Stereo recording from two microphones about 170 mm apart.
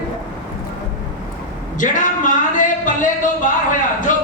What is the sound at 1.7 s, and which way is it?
Music, 50° left (ahead or behind).